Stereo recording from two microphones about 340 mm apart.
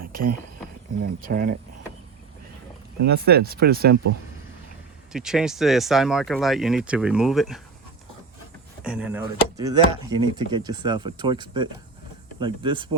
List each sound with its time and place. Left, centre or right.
0.0 s a sound: right
1.2 s speech: right
3.1 s speech: right
5.1 s speech: centre
8.8 s speech: centre